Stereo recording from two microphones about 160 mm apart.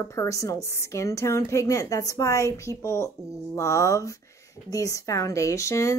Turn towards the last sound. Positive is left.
turn(degrees=20)  # may be behind; listen again after turning